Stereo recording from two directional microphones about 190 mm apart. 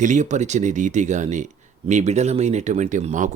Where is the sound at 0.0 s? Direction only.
40° right (ahead or behind).